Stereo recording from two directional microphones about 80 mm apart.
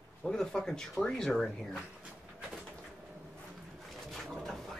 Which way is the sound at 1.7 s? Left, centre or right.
Centre.